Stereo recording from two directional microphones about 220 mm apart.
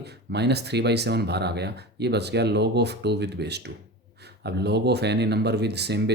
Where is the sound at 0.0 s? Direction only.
50° right (ahead or behind).